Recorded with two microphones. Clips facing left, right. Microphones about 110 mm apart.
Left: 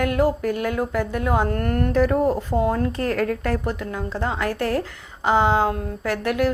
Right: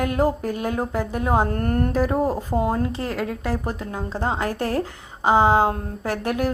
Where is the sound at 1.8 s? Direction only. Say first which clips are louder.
Left 4 dB; 35° right (ahead or behind).